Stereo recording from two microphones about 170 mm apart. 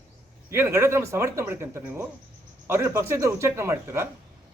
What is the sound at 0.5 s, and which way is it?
A man's voice, 15° right (ahead or behind).